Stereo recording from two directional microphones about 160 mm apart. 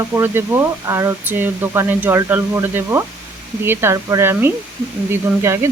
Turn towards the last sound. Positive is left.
turn(degrees=-15)  # may be behind; listen again after turning